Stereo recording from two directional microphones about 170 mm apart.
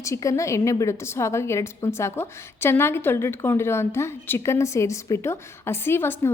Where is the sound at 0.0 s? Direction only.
20° left (ahead or behind).